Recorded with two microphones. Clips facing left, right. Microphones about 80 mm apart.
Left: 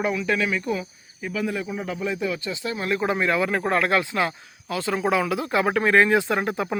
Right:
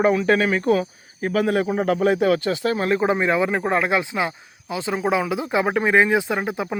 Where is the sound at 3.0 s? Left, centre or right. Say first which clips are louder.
Right 3 dB; right.